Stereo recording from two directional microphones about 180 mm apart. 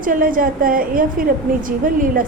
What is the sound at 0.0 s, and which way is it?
A woman's voice, 50° right (ahead or behind).